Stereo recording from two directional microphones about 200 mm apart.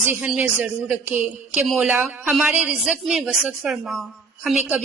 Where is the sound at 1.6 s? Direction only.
5° right (ahead or behind).